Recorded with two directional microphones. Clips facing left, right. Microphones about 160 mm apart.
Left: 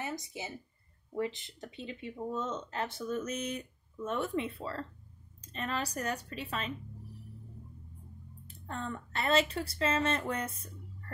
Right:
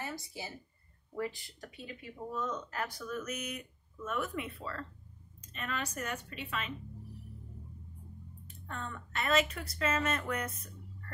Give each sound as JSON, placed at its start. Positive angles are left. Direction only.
{"t": 0.0, "sound": "a woman's voice", "side_deg": 20}
{"t": 8.5, "sound": "speech", "side_deg": 35}